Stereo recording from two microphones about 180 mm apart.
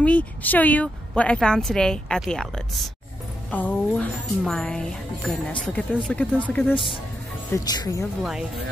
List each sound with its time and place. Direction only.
0.0 s a woman's voice: 10° left (ahead or behind)
7.5 s speech: 20° left (ahead or behind)
8.2 s a woman's voice: 5° right (ahead or behind)